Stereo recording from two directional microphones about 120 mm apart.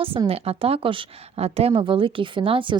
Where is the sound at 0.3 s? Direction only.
55° right (ahead or behind).